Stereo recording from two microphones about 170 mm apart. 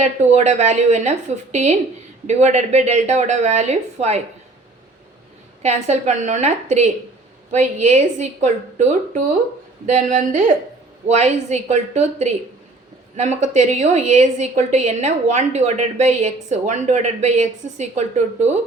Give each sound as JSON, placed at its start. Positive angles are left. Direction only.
{"t": 0.3, "sound": "a woman's voice", "side_deg": -40}
{"t": 5.6, "sound": "a woman's voice", "side_deg": -40}